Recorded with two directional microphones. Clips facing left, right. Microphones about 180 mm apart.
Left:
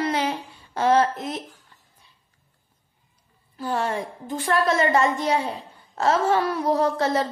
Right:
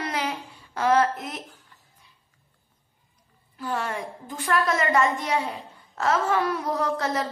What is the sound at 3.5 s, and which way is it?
A woman's voice, 30° left (ahead or behind).